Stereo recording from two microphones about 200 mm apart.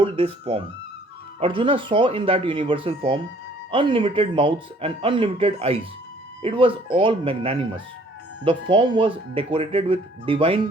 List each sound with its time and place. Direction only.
0.0 s speech: 25° right (ahead or behind)